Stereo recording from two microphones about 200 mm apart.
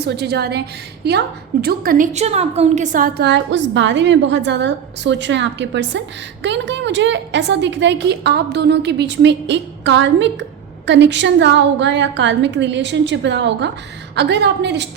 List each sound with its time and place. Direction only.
0.0 s a woman's voice: 55° right (ahead or behind)